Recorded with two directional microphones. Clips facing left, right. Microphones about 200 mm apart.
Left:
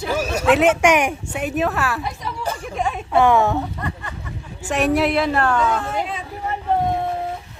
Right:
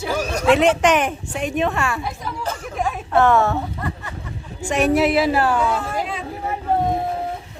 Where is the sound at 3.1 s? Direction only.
15° left (ahead or behind).